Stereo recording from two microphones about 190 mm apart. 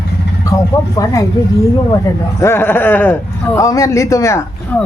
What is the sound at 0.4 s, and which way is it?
Speech, 15° left (ahead or behind).